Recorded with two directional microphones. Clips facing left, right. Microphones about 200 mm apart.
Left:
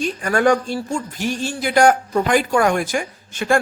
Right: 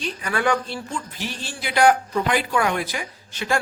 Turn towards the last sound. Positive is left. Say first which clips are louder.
# left 6 dB
turn(degrees=50)  # may be behind; listen again after turning